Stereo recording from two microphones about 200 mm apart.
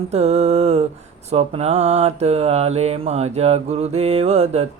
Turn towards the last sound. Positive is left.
turn(degrees=-30)  # may be behind; listen again after turning